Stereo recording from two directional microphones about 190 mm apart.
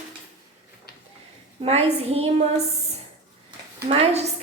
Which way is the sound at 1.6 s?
30° right (ahead or behind).